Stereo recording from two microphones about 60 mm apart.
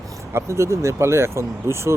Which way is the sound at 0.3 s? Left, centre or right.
Right.